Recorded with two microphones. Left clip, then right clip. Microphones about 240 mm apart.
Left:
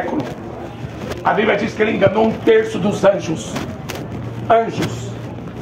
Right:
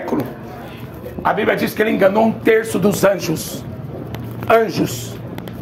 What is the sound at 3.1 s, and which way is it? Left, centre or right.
Speech, right.